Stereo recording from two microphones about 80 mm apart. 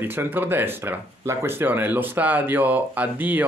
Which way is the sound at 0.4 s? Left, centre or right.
Right.